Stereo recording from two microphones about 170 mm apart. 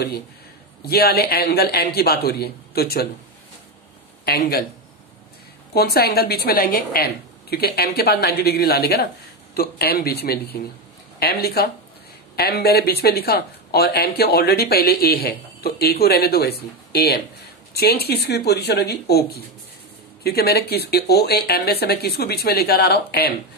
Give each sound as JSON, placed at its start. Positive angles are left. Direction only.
{"t": 0.8, "sound": "speech", "side_deg": 65}
{"t": 4.2, "sound": "speech", "side_deg": 65}
{"t": 5.7, "sound": "speech", "side_deg": 70}